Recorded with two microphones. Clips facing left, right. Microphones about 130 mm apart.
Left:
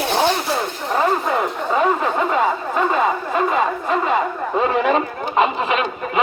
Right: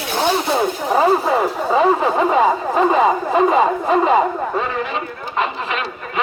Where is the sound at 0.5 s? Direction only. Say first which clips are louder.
Right 4 dB; 10° right (ahead or behind).